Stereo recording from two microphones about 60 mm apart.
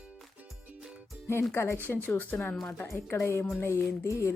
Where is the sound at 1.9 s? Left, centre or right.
Left.